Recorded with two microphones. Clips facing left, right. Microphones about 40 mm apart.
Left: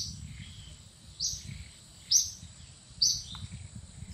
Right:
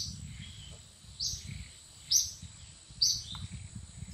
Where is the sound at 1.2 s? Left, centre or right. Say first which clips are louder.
Left 1 dB; centre.